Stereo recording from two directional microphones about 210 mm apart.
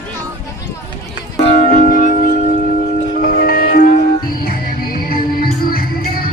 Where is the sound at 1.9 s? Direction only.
40° left (ahead or behind).